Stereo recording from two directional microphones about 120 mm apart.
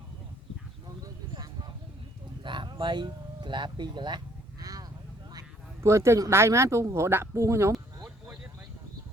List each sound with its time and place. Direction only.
2.4 s speech: 40° right (ahead or behind)
4.6 s vehicle: 30° right (ahead or behind)
5.3 s speech: 30° right (ahead or behind)